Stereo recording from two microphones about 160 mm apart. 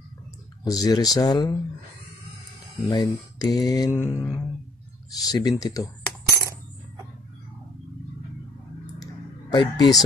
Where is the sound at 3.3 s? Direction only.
25° left (ahead or behind).